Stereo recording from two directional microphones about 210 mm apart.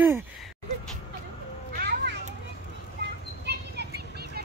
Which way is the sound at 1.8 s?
50° right (ahead or behind).